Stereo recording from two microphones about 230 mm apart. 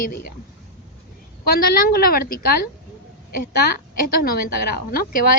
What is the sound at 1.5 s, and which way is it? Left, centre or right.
A woman's voice, left.